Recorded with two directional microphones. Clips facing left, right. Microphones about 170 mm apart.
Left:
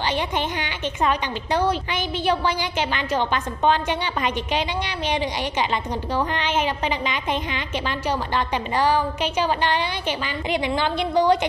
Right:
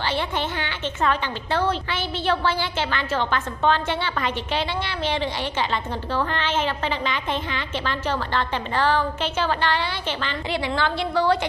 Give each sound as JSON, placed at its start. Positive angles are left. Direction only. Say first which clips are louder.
{"t": 0.1, "sound": "a woman's voice", "louder": "left 1 dB", "side_deg": 15}